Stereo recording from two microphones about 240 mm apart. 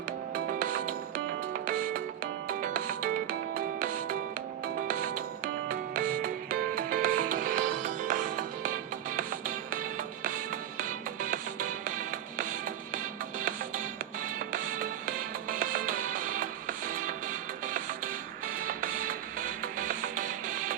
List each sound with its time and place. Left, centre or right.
0.3 s music: right
14.3 s music: right
18.6 s music: right